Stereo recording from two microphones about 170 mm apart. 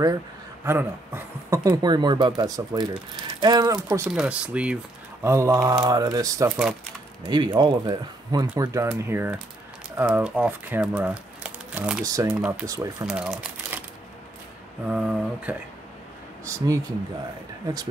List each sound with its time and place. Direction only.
0.7 s speech: 15° right (ahead or behind)
1.7 s speech: 25° right (ahead or behind)
4.1 s speech: 5° right (ahead or behind)
12.0 s speech: 20° right (ahead or behind)
12.4 s speech: 5° right (ahead or behind)
12.6 s speech: 20° right (ahead or behind)
13.0 s speech: 5° right (ahead or behind)
13.7 s shuffling cards: 10° right (ahead or behind)
14.9 s speech: 5° right (ahead or behind)
16.4 s speech: 20° right (ahead or behind)